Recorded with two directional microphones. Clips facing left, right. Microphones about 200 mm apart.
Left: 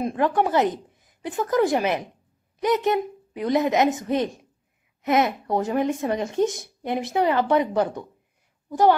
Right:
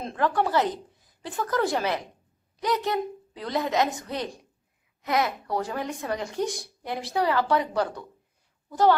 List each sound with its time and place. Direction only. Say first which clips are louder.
0.0 s a woman's voice: left 4 dB; 20° left (ahead or behind)